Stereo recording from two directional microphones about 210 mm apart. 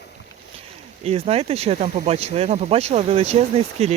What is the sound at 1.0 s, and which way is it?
Speech, 30° right (ahead or behind).